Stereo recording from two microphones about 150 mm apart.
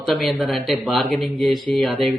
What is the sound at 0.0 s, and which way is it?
Speech, centre (ahead or behind).